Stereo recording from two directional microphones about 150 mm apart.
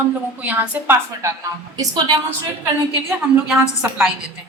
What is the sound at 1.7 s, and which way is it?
Speech, 25° right (ahead or behind).